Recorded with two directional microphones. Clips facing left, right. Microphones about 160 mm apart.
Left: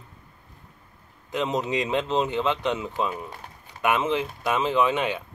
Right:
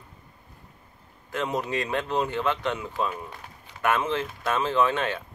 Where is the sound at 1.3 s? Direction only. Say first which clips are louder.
Left 2 dB; 20° left (ahead or behind).